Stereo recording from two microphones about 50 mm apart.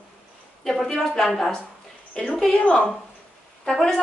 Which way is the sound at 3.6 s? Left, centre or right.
Centre.